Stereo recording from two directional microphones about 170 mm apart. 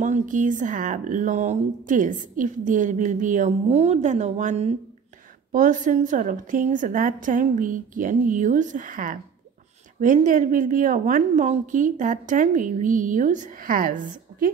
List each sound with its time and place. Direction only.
0.0 s speech: 45° right (ahead or behind)